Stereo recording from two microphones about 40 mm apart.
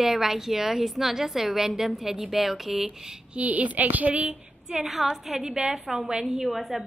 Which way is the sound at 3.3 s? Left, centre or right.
Right.